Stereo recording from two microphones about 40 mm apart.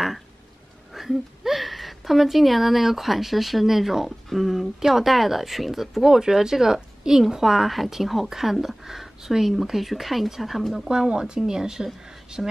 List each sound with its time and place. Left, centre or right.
0.9 s a woman's voice: centre
10.9 s speech: centre